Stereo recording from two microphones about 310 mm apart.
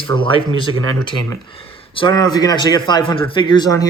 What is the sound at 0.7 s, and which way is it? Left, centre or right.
Speech, right.